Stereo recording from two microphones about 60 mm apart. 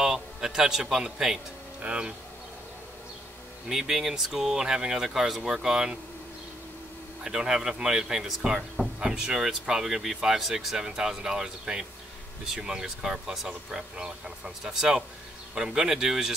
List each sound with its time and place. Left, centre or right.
0.0 s a man's voice: centre
3.6 s speech: centre
7.2 s speech: centre